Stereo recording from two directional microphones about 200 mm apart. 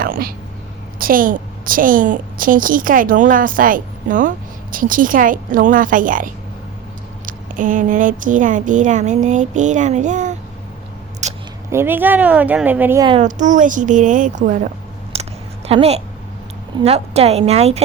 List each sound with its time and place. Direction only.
0.0 s a woman's voice: 45° right (ahead or behind)
7.3 s speech: 40° right (ahead or behind)
11.2 s a sound: 35° right (ahead or behind)
11.7 s speech: 10° right (ahead or behind)
13.0 s speech: 25° right (ahead or behind)
13.2 s speech: 40° right (ahead or behind)
15.1 s a sound: 30° right (ahead or behind)
16.8 s speech: 30° right (ahead or behind)